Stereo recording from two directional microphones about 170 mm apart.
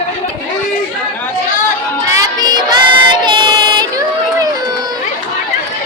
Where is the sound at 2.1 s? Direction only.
25° right (ahead or behind).